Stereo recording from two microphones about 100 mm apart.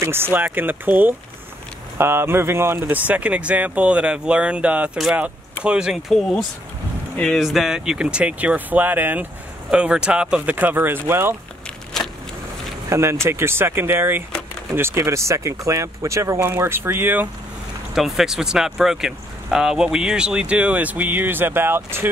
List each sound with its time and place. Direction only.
0.0 s speech: 25° right (ahead or behind)
7.2 s speech: 5° left (ahead or behind)
7.4 s speech: 5° right (ahead or behind); by 11.3 s 25° right (ahead or behind)
11.6 s a sound: 5° left (ahead or behind)
12.9 s speech: 25° right (ahead or behind)
17.9 s speech: 5° right (ahead or behind); by 22.1 s 25° right (ahead or behind)